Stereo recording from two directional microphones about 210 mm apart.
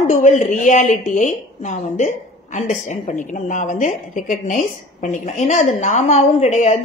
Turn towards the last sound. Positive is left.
turn(degrees=35)  # may be behind; listen again after turning